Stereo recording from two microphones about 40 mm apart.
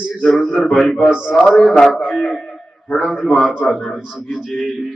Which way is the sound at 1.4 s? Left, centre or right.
Left.